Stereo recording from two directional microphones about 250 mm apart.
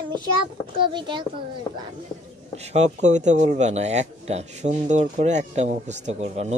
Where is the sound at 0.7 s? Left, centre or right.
Centre.